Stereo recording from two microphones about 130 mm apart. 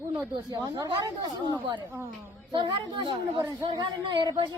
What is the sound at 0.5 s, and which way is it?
Speech, 25° right (ahead or behind).